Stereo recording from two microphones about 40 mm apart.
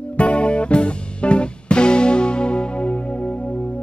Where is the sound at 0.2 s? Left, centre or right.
Left.